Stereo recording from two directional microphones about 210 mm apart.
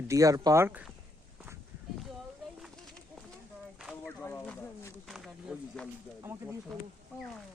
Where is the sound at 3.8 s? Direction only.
Centre (ahead or behind).